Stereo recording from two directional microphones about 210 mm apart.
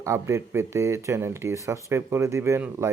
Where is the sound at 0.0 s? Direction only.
15° right (ahead or behind).